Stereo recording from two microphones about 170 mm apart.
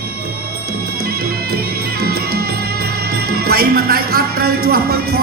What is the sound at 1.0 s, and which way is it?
Music, 65° right (ahead or behind).